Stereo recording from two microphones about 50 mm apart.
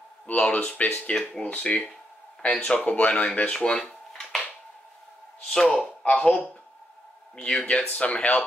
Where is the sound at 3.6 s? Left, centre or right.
Centre.